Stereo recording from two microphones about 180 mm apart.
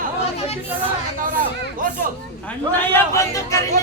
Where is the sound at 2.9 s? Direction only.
15° left (ahead or behind).